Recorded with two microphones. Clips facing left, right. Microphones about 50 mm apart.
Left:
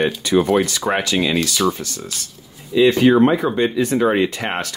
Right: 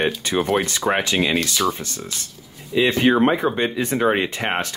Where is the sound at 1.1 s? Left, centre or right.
Centre.